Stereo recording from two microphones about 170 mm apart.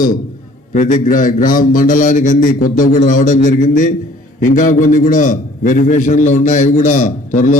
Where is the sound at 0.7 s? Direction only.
45° left (ahead or behind).